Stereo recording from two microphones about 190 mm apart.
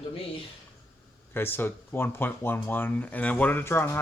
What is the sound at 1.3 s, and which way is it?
Speech, 10° left (ahead or behind).